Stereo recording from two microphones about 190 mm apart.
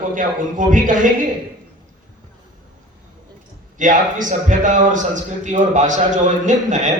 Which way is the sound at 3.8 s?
45° right (ahead or behind).